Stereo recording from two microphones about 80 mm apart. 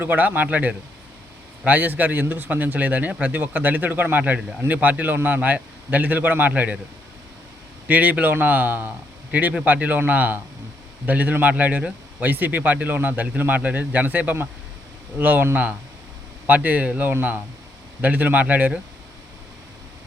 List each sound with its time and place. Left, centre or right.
0.0 s speech: right
7.9 s speech: centre